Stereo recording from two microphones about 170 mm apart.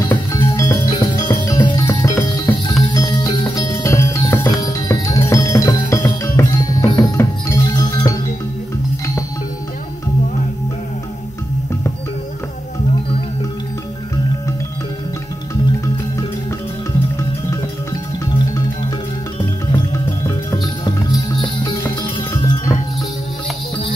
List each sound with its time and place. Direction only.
0.0 s music: 15° left (ahead or behind)
19.7 s music: 20° left (ahead or behind)